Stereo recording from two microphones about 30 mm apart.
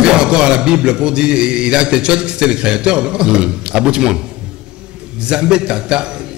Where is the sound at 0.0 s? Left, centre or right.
Right.